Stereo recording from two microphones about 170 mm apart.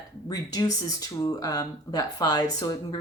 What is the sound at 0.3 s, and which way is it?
Speech, 20° left (ahead or behind).